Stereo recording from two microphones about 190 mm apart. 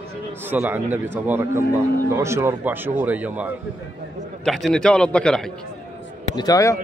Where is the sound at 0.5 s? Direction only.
10° right (ahead or behind).